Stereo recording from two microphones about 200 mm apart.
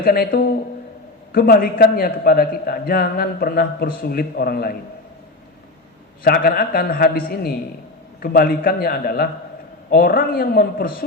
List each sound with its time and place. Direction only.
0.0 s a man's voice: 45° left (ahead or behind)
6.2 s a man's voice: 50° left (ahead or behind)